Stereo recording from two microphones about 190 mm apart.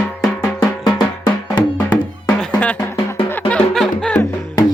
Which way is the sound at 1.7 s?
10° left (ahead or behind).